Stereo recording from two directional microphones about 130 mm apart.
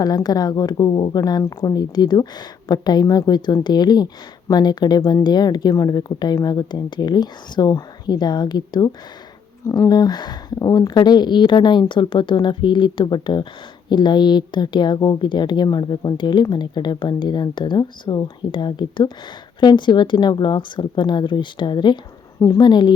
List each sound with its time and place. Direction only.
0.0 s speech: 30° left (ahead or behind)